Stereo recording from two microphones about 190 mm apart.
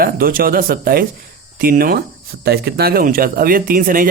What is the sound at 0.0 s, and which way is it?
Speech, 50° right (ahead or behind).